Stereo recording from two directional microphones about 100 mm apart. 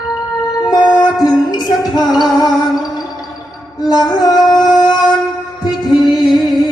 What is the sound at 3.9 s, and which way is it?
Music, 40° left (ahead or behind).